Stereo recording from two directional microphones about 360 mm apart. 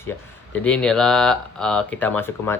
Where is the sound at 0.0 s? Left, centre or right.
Centre.